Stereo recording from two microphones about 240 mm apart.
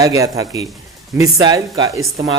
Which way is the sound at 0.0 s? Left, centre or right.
Centre.